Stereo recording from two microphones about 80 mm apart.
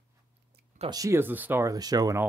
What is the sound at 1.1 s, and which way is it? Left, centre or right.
Speech, right.